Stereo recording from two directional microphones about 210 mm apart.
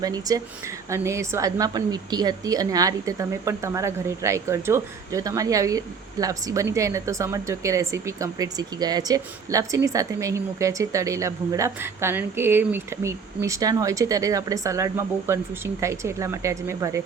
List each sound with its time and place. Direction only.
0.0 s speech: 15° right (ahead or behind)